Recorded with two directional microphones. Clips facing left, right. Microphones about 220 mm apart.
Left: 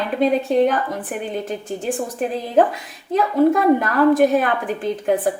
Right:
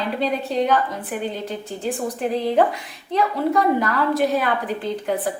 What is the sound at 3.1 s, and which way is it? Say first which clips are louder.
A woman's voice: left 5 dB; 50° left (ahead or behind).